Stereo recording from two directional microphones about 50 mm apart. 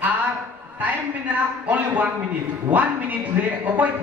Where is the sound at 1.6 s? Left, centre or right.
Right.